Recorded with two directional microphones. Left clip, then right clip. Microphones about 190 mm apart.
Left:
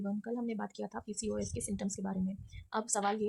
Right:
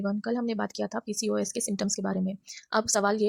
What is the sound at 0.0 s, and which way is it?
A woman's voice, 25° right (ahead or behind).